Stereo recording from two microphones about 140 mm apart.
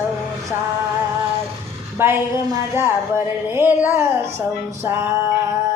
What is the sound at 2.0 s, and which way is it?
Music, 20° right (ahead or behind).